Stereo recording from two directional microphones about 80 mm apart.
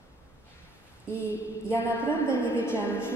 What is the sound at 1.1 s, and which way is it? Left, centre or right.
Speech, left.